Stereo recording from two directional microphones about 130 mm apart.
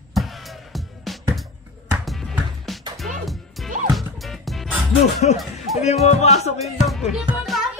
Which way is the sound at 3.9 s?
Centre (ahead or behind).